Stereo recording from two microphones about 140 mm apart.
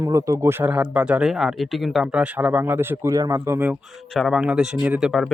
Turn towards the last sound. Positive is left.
turn(degrees=0)  # may be behind; listen again after turning